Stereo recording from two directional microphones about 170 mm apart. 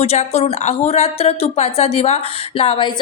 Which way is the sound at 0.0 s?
40° left (ahead or behind).